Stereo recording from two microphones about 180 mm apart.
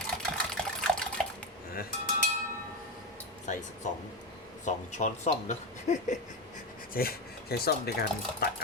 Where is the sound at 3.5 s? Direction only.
45° left (ahead or behind).